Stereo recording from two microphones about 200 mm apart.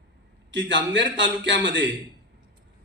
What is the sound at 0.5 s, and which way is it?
A man's voice, 65° right (ahead or behind).